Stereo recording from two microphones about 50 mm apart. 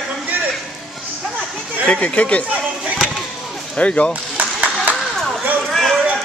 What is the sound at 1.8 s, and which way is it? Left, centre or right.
Speech, left.